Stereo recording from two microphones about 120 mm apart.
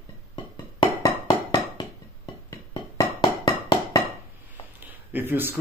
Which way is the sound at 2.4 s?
35° left (ahead or behind).